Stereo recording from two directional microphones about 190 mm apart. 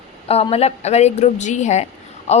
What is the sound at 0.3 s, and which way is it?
A woman's voice, 30° left (ahead or behind).